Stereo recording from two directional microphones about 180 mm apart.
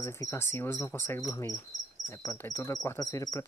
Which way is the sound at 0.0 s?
15° left (ahead or behind).